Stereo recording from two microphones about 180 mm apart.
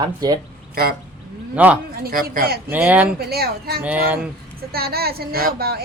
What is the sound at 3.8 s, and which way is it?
Speech, 10° right (ahead or behind).